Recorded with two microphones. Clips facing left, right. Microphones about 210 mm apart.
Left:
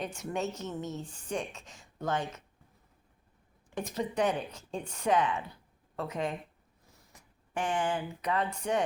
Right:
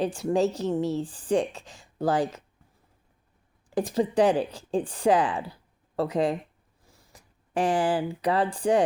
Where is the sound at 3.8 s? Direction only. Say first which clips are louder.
Right 8 dB; 30° right (ahead or behind).